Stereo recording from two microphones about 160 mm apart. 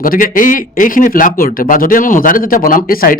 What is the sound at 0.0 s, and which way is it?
Speech, 60° left (ahead or behind).